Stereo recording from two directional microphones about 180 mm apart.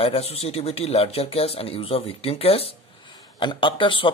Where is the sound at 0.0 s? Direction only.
35° left (ahead or behind).